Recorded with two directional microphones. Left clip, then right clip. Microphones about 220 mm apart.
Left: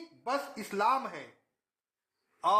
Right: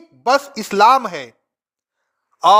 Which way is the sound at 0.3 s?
45° right (ahead or behind).